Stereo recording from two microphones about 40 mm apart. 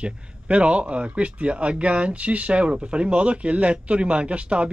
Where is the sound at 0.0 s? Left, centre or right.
Right.